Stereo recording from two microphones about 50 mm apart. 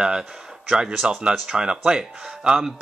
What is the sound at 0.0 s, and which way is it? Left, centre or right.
A man's voice, centre.